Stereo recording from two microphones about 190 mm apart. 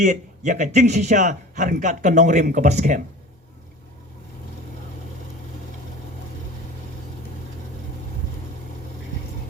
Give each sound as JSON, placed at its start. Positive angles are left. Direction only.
{"t": 0.0, "sound": "a man's voice", "side_deg": -40}